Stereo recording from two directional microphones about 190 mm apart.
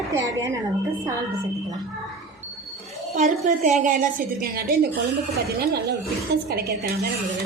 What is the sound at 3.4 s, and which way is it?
A woman's voice, 40° right (ahead or behind).